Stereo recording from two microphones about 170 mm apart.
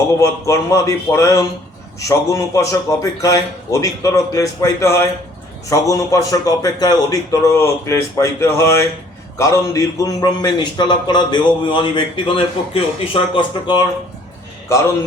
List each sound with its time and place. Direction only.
0.2 s a man's voice: 15° left (ahead or behind)